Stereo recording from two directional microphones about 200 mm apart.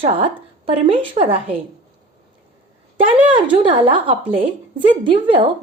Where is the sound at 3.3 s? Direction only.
25° right (ahead or behind).